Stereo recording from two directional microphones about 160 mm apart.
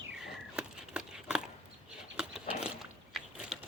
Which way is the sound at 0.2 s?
Centre (ahead or behind).